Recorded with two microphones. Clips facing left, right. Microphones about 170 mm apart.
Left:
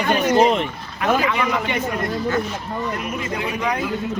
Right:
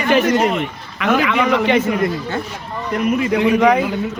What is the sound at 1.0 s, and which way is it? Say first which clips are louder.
Speech: right 3 dB; 85° right.